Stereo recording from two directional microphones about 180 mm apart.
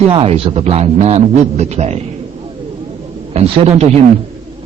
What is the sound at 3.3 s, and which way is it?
Speech, 35° right (ahead or behind).